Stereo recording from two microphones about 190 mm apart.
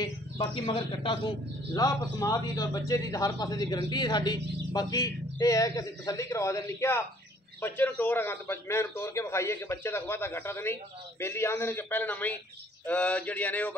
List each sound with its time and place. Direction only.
0.0 s a man's voice: 25° left (ahead or behind); by 13.7 s 10° left (ahead or behind)